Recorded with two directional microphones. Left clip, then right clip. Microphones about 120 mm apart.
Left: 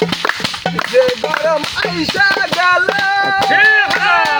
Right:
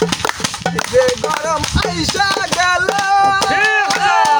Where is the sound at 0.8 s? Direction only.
30° right (ahead or behind).